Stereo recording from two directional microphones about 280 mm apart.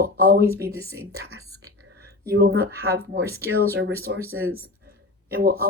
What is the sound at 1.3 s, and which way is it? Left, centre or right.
Speech, right.